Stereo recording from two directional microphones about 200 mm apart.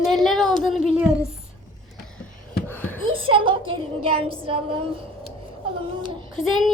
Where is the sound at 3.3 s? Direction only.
25° right (ahead or behind).